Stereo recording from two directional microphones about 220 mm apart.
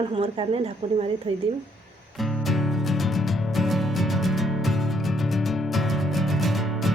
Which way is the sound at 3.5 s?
Centre (ahead or behind).